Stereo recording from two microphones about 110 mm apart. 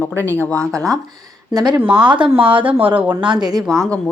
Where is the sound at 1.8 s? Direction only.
10° right (ahead or behind).